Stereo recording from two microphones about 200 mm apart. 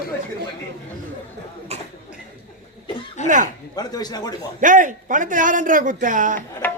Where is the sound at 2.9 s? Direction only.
25° left (ahead or behind).